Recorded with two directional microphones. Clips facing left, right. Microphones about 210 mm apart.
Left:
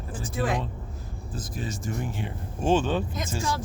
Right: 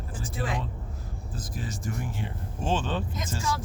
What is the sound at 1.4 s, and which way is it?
Speech, 25° left (ahead or behind).